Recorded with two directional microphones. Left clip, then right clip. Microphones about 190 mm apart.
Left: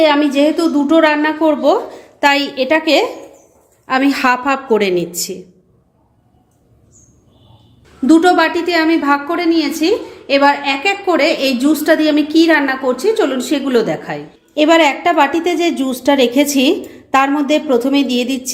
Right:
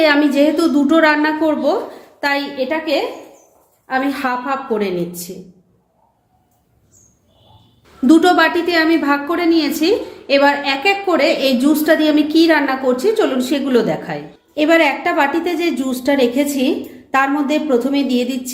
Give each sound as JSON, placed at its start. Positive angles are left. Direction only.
{"t": 0.0, "sound": "a woman's voice", "side_deg": 15}
{"t": 2.2, "sound": "a woman's voice", "side_deg": 45}
{"t": 8.0, "sound": "a woman's voice", "side_deg": 10}
{"t": 17.2, "sound": "a woman's voice", "side_deg": 25}